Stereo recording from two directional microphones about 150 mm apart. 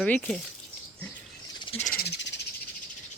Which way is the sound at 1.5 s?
35° left (ahead or behind).